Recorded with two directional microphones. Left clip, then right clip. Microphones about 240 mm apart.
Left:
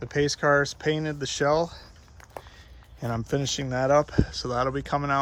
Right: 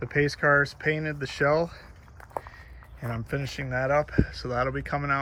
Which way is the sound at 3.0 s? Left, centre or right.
Centre.